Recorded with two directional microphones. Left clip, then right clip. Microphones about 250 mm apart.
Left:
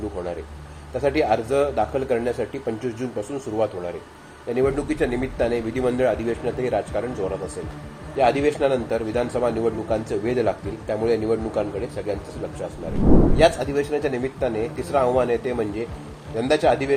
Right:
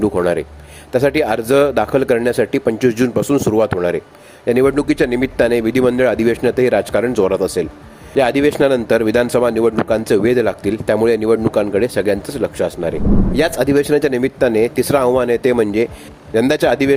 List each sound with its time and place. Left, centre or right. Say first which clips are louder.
0.9 s speech: right 6 dB; right